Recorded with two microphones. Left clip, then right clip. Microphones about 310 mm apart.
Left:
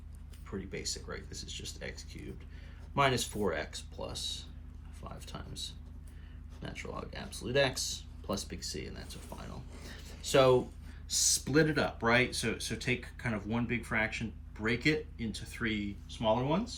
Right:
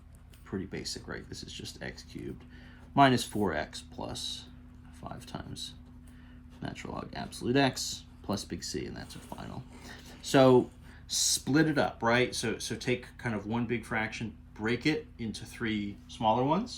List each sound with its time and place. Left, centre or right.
0.7 s speech: centre
11.1 s speech: centre